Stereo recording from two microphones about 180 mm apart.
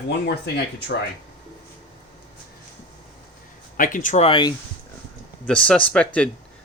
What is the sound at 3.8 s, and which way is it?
Speech, 45° left (ahead or behind).